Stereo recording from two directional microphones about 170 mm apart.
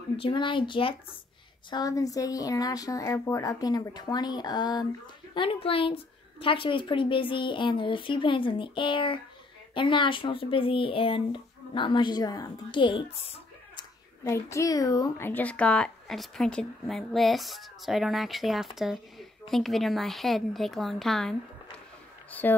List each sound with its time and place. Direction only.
0.2 s a woman's voice: 30° left (ahead or behind)
14.2 s a woman's voice: 15° left (ahead or behind)